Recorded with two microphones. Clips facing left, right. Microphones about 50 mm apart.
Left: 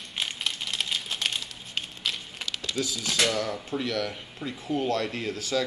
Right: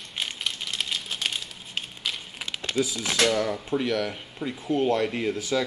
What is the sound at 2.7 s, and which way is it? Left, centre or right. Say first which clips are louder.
Speech: right 5 dB; centre.